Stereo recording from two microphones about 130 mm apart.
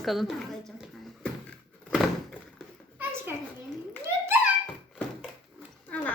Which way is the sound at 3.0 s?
15° right (ahead or behind).